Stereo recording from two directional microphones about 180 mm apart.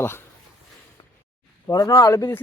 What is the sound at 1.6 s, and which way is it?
Speech, 20° left (ahead or behind).